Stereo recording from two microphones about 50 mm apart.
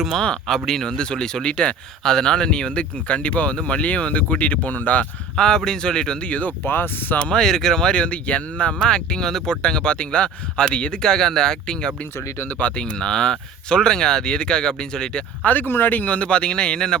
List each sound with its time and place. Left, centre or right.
0.4 s speech: centre; by 5.0 s left
5.4 s speech: centre
6.7 s speech: left
7.3 s speech: centre
12.5 s speech: left
15.4 s speech: left; by 17.0 s centre